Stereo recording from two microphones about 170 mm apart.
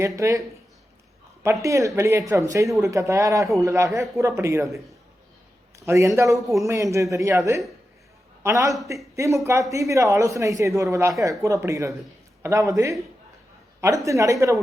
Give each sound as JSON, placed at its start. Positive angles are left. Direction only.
{"t": 0.2, "sound": "speech", "side_deg": -20}
{"t": 1.6, "sound": "speech", "side_deg": -20}
{"t": 5.8, "sound": "speech", "side_deg": -15}